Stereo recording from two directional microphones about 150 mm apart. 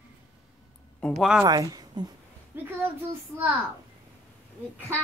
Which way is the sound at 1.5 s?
25° right (ahead or behind).